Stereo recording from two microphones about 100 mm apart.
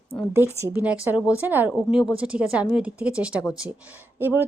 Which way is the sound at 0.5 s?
25° right (ahead or behind).